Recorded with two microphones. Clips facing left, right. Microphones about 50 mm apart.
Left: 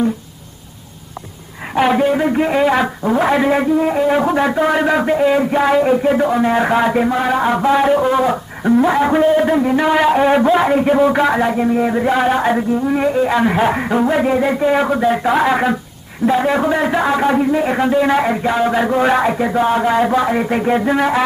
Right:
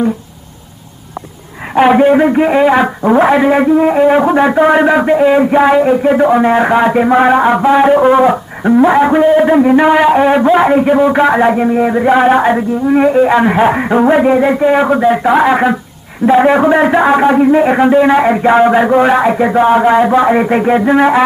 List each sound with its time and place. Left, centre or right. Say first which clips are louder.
1.8 s music: right 7 dB; right
7.1 s music: right 7 dB; right; by 15.8 s centre
16.3 s a man's voice: right 9 dB; right